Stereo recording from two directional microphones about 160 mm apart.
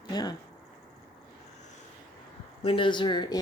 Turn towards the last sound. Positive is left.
turn(degrees=30)  # may be behind; listen again after turning